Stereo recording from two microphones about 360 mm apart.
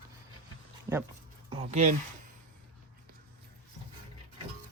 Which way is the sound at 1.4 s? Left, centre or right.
Centre.